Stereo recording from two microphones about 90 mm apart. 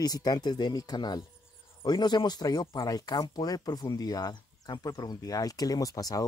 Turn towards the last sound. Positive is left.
turn(degrees=40)  # may be behind; listen again after turning